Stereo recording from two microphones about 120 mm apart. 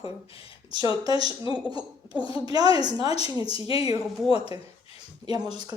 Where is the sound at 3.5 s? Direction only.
50° left (ahead or behind).